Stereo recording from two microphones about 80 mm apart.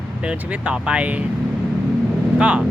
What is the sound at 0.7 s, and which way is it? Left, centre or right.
Speech, centre.